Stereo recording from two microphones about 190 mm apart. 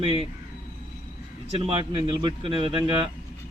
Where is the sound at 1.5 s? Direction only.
30° right (ahead or behind).